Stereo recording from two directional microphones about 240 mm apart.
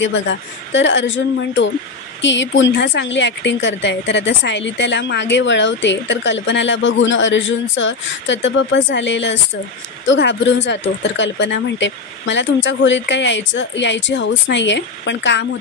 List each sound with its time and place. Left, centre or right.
0.0 s a woman's voice: left